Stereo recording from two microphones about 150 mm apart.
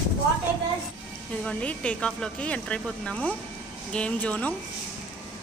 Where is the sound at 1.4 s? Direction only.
5° left (ahead or behind).